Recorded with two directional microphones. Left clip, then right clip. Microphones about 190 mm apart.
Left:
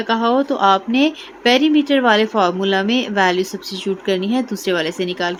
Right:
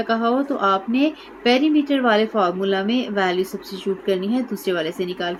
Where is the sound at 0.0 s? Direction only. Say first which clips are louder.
Left 4 dB; 40° left (ahead or behind).